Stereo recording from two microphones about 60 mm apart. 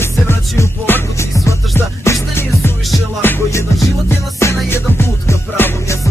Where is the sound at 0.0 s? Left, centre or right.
Left.